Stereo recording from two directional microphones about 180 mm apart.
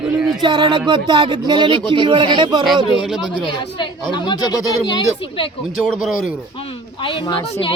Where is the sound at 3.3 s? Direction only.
25° left (ahead or behind).